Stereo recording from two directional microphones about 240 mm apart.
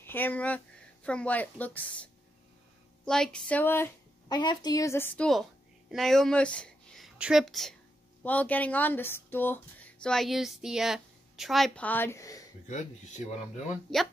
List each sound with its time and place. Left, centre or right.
0.0 s speech: centre
3.1 s a woman's voice: centre
12.6 s speech: left